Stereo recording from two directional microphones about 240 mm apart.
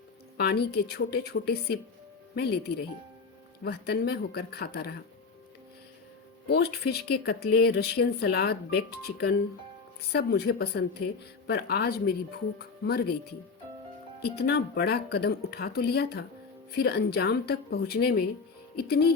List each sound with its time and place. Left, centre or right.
0.3 s speech: left
3.6 s speech: left
6.5 s speech: left
14.2 s speech: left